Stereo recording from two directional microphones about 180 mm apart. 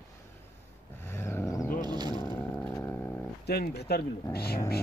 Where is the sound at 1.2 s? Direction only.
15° left (ahead or behind).